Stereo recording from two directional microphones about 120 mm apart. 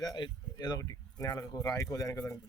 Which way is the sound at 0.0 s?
35° left (ahead or behind).